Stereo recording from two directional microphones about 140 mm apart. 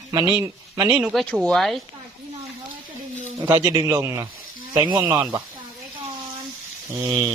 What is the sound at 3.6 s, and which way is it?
A man's voice, 25° right (ahead or behind).